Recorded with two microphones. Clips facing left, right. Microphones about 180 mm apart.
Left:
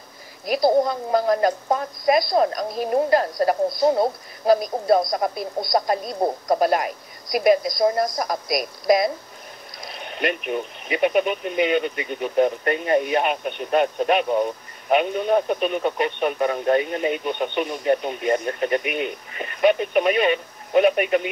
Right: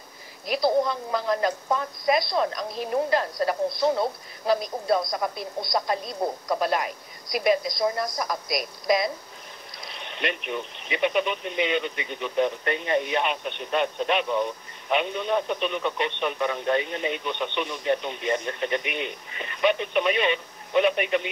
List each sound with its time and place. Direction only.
0.8 s speech: 45° left (ahead or behind)